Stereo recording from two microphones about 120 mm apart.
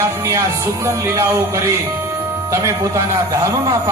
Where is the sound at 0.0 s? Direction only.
25° right (ahead or behind).